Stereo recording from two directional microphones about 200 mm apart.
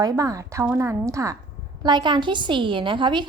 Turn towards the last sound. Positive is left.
turn(degrees=-25)  # may be behind; listen again after turning